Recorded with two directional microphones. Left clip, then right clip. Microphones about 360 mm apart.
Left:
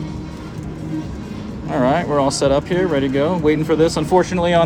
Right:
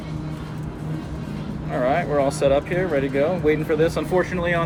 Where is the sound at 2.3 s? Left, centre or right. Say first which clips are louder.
Left 1 dB; centre.